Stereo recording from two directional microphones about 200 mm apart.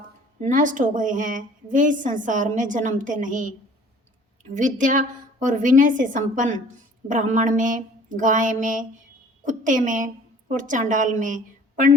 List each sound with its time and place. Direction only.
0.3 s a woman's voice: 40° right (ahead or behind)
4.5 s a woman's voice: 40° right (ahead or behind)